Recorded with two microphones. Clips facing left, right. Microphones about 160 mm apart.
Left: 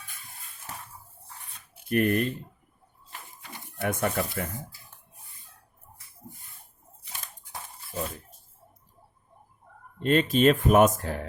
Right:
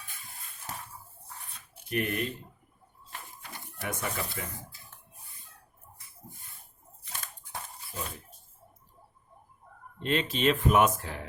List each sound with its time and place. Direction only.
1.9 s speech: 50° left (ahead or behind)
3.8 s speech: 55° left (ahead or behind)
10.0 s speech: 45° left (ahead or behind)